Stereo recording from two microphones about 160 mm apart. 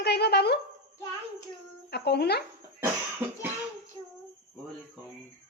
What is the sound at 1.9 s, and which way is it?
Speech, 90° left.